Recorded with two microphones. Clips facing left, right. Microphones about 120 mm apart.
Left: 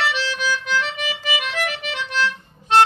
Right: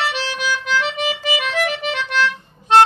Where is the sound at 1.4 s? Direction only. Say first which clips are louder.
Right 5 dB; 90° right.